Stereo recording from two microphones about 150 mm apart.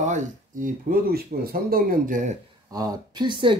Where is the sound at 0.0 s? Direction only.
55° right (ahead or behind).